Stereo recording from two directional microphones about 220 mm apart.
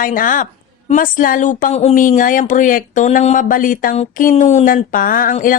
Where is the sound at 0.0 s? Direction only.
40° left (ahead or behind).